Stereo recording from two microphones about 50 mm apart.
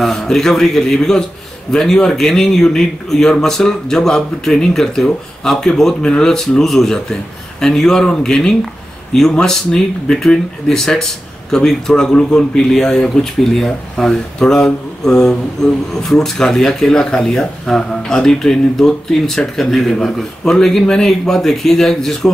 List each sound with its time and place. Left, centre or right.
0.0 s a man's voice: centre